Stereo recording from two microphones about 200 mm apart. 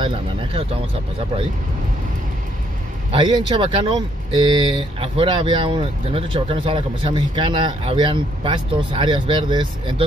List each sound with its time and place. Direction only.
0.0 s speech: 25° right (ahead or behind)
3.1 s speech: 25° right (ahead or behind)